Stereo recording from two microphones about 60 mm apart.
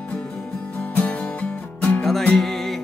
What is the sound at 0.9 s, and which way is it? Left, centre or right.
Music, left.